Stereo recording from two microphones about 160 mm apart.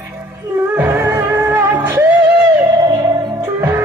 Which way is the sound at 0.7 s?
15° right (ahead or behind).